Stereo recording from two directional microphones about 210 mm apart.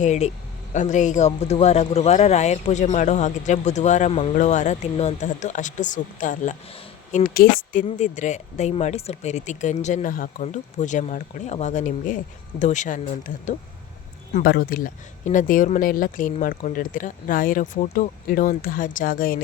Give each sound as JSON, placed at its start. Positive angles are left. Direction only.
{"t": 0.0, "sound": "a man's voice", "side_deg": 35}